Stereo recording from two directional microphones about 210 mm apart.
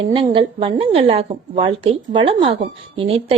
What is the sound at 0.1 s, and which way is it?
A woman's voice, 25° right (ahead or behind).